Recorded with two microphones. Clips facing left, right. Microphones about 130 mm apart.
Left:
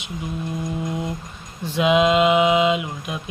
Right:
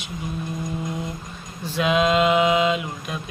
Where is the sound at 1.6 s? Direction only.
20° left (ahead or behind).